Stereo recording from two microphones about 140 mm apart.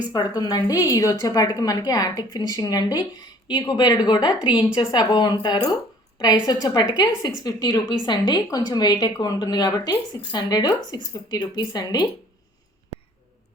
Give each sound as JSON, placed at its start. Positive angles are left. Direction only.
{"t": 0.1, "sound": "a woman's voice", "side_deg": 30}